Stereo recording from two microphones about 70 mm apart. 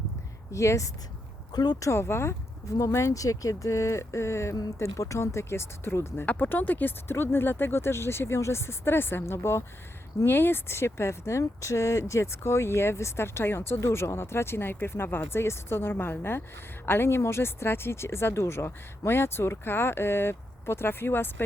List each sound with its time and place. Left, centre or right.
0.5 s speech: left
1.5 s speech: left
1.8 s speech: left
6.2 s speech: left